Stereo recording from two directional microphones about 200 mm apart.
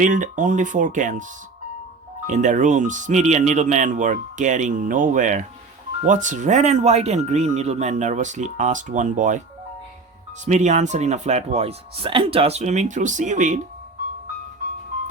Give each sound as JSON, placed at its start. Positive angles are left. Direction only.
{"t": 0.0, "sound": "speech", "side_deg": -40}
{"t": 2.2, "sound": "speech", "side_deg": -35}
{"t": 10.4, "sound": "speech", "side_deg": -35}